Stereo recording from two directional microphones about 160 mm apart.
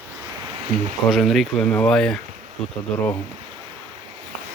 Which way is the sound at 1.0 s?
Centre (ahead or behind).